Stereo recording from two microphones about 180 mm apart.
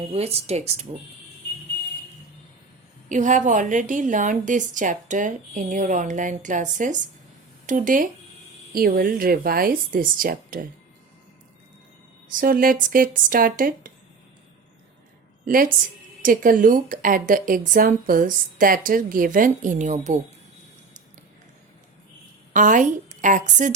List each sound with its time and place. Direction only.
0.1 s speech: 35° right (ahead or behind)
3.1 s speech: 45° right (ahead or behind)
12.3 s speech: 50° right (ahead or behind)
15.4 s a woman's voice: 50° right (ahead or behind)
22.5 s speech: 45° right (ahead or behind)